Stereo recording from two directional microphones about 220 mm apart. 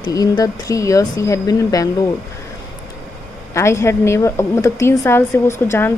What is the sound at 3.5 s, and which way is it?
Speech, 15° left (ahead or behind).